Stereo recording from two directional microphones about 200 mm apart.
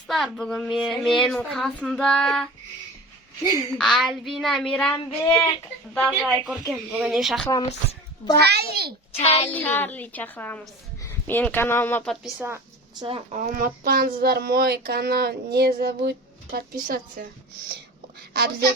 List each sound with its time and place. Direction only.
0.1 s speech: centre (ahead or behind)
3.8 s speech: 5° left (ahead or behind)
6.1 s speech: 5° right (ahead or behind)
8.4 s a sound: 55° right (ahead or behind)
9.2 s child singing: 30° left (ahead or behind)
9.5 s a woman's voice: 10° left (ahead or behind)
12.2 s a woman's voice: 10° right (ahead or behind)
13.1 s speech: 35° right (ahead or behind); by 14.1 s 50° right (ahead or behind)
14.2 s a sound: 50° right (ahead or behind)
18.2 s a woman's voice: 50° right (ahead or behind)